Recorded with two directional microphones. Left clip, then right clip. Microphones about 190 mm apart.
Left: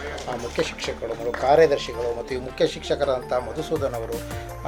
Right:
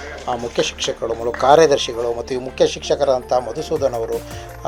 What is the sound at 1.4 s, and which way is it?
Speech, 40° right (ahead or behind).